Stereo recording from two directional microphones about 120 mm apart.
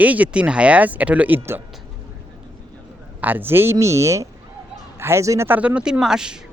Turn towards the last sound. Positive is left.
turn(degrees=-5)  # may be behind; listen again after turning